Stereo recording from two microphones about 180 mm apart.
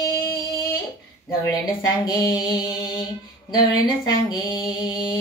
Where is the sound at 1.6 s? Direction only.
20° left (ahead or behind).